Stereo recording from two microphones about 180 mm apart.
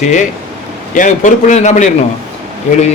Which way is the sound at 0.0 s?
45° left (ahead or behind).